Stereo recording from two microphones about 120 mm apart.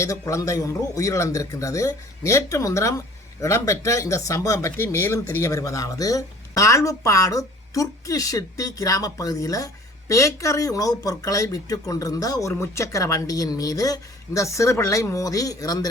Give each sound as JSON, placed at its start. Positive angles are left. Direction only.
{"t": 0.0, "sound": "speech", "side_deg": 25}